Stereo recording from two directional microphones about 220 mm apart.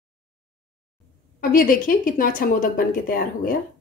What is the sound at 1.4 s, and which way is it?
Speech, 40° left (ahead or behind).